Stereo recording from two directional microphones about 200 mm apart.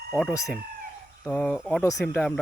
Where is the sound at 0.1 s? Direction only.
Centre (ahead or behind).